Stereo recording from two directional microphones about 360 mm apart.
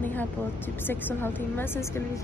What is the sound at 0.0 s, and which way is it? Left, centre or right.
Vehicle, centre.